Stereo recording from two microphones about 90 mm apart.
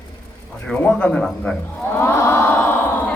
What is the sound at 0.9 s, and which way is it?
Speech, 15° left (ahead or behind).